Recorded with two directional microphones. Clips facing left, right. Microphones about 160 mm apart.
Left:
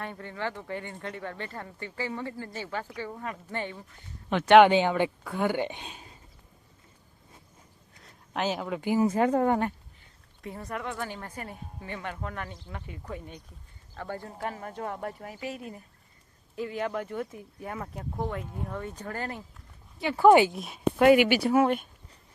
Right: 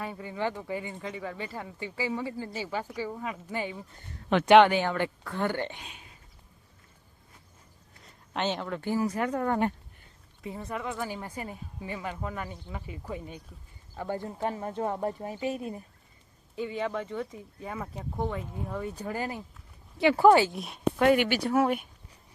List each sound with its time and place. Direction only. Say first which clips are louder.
0.0 s speech: right 2 dB; 10° right (ahead or behind)
4.6 s speech: left 3 dB; 15° left (ahead or behind)
5.8 s whispering: left 4 dB; 35° left (ahead or behind)
8.0 s speech: left 1 dB; 5° left (ahead or behind)
9.0 s speech: left 5 dB; 25° left (ahead or behind)
10.4 s speech: right 1 dB; centre (ahead or behind); by 15.8 s 25° right (ahead or behind)
16.6 s speech: even; centre (ahead or behind)
20.5 s speech: left 1 dB; centre (ahead or behind)